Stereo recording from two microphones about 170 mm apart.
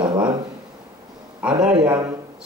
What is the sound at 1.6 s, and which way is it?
Speech, 5° right (ahead or behind).